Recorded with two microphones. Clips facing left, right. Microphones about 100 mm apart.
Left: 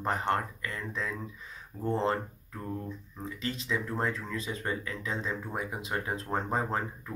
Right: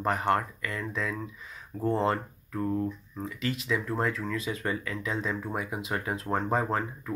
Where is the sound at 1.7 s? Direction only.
70° right (ahead or behind).